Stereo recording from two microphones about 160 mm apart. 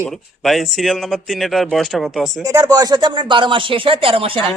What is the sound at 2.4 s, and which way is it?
Speech, 25° right (ahead or behind).